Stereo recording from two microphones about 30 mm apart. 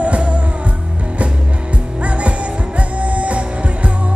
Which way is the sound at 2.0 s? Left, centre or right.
Right.